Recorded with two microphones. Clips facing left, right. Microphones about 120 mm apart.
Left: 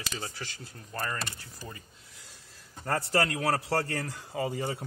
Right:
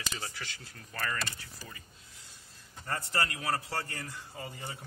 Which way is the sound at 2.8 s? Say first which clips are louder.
Left 6 dB; 80° left.